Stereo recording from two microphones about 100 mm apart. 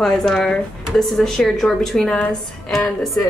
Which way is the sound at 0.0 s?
5° left (ahead or behind).